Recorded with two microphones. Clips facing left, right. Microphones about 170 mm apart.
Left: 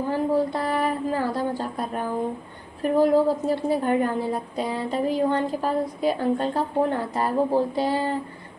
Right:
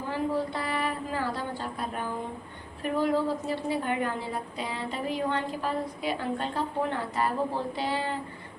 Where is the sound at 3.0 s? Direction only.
40° left (ahead or behind).